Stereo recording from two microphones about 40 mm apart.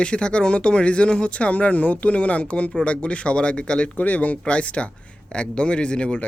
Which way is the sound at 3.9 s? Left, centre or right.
Left.